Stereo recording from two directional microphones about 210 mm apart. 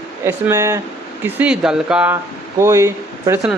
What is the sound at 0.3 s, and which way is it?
Speech, 10° right (ahead or behind).